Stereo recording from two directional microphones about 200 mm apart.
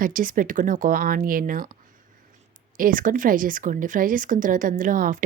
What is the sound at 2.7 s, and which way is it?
A woman's voice, 45° right (ahead or behind).